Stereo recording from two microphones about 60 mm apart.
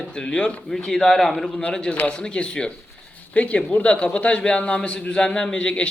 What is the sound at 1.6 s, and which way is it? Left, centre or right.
A man's voice, centre.